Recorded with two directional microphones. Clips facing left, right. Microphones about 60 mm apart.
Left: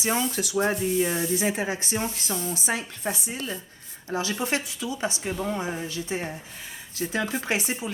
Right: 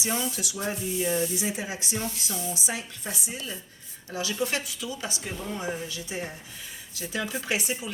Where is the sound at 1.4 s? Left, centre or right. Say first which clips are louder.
Left 5 dB; left.